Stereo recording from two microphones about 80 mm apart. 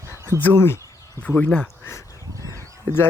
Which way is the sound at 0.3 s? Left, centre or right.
Left.